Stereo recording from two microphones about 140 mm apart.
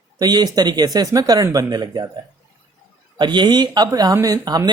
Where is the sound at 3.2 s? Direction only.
35° right (ahead or behind).